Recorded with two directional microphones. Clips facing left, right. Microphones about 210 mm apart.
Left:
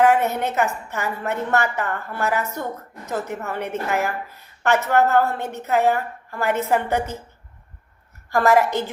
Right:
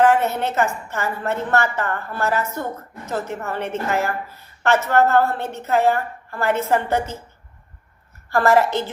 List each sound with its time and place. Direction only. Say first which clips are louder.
0.0 s a woman's voice: right 1 dB; 15° left (ahead or behind)
8.3 s a woman's voice: right 1 dB; 15° left (ahead or behind)